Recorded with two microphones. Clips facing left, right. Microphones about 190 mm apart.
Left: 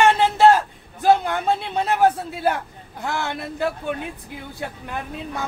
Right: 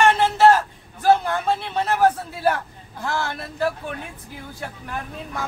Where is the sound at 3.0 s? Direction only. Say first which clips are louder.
Even; 20° left (ahead or behind).